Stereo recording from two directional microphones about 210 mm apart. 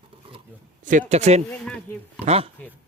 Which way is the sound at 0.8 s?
35° right (ahead or behind).